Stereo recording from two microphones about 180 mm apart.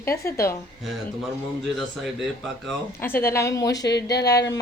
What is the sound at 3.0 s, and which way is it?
Speech, 10° left (ahead or behind).